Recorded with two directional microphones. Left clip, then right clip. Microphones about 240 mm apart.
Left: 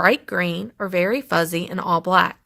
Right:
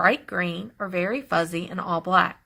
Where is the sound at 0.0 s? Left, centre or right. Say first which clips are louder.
Left 3 dB; left.